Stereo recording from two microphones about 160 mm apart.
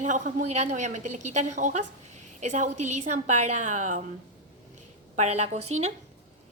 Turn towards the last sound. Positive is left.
turn(degrees=-45)  # may be behind; listen again after turning